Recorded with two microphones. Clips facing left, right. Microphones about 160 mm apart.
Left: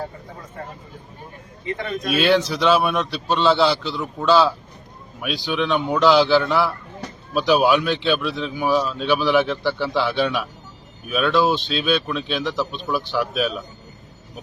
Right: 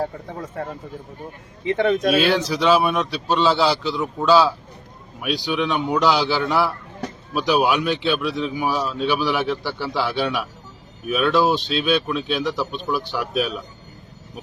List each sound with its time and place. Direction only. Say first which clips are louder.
1.6 s speech: right 8 dB; 90° right
2.1 s speech: left 1 dB; centre (ahead or behind)
7.8 s speech: even; 10° right (ahead or behind)